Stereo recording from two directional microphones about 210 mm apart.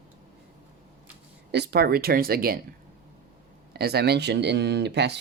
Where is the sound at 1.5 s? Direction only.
50° right (ahead or behind).